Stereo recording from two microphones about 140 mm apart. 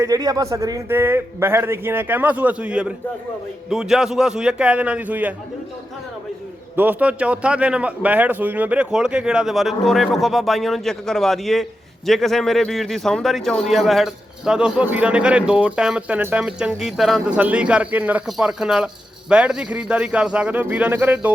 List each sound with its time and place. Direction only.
0.0 s a man's voice: 25° right (ahead or behind)
6.7 s a man's voice: 10° right (ahead or behind)